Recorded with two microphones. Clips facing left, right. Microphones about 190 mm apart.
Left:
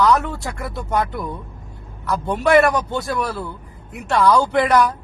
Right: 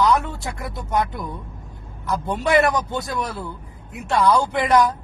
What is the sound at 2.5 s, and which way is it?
Speech, 20° right (ahead or behind).